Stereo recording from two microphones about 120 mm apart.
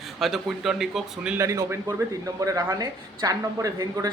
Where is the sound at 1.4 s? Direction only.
25° right (ahead or behind).